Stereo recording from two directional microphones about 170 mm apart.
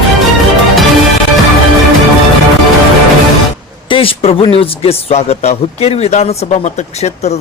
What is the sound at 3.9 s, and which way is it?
Speech, 30° left (ahead or behind).